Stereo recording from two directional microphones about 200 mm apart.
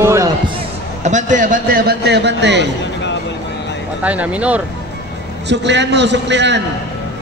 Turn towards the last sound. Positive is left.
turn(degrees=-60)  # may be behind; listen again after turning